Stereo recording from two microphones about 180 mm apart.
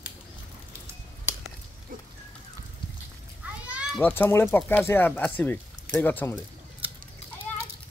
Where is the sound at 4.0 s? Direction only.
10° left (ahead or behind).